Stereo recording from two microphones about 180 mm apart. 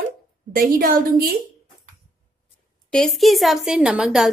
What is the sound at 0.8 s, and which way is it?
Speech, 55° right (ahead or behind).